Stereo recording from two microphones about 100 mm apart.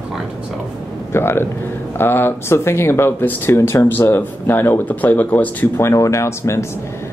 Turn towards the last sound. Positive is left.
turn(degrees=30)  # may be behind; listen again after turning